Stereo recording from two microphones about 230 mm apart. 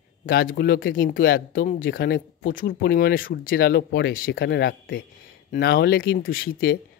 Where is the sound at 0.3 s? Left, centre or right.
Left.